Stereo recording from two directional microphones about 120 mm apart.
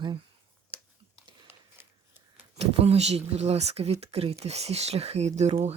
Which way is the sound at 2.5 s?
60° right (ahead or behind).